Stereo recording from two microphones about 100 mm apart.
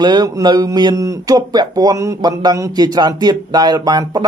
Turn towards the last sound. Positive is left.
turn(degrees=-45)  # may be behind; listen again after turning